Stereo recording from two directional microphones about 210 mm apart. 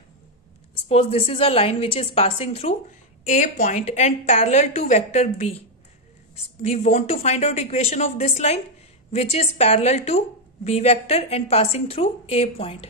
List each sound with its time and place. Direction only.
0.8 s a woman's voice: 30° left (ahead or behind)
6.6 s a woman's voice: 30° left (ahead or behind)